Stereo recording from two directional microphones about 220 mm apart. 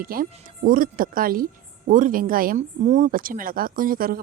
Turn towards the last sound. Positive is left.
turn(degrees=-40)  # may be behind; listen again after turning